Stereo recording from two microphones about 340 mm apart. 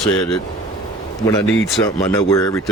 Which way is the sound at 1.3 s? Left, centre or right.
Centre.